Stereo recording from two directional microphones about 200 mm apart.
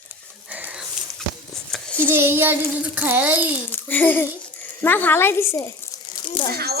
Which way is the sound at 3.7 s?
10° left (ahead or behind).